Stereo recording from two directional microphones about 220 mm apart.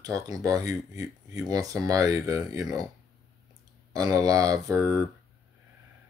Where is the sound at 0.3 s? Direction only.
15° right (ahead or behind).